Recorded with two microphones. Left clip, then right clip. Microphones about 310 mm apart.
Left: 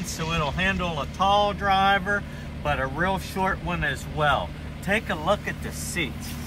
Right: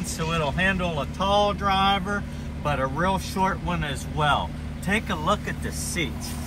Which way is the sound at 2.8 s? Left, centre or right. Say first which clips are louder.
Right 4 dB; centre.